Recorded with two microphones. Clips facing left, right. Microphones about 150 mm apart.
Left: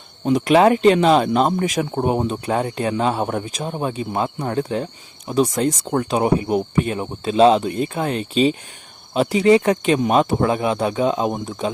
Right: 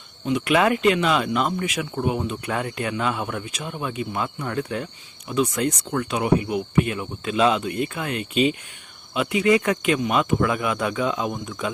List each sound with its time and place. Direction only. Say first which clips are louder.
0.3 s speech: left 6 dB; 40° left (ahead or behind)